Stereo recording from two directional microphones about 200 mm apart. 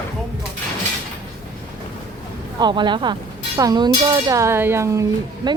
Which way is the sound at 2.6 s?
20° right (ahead or behind).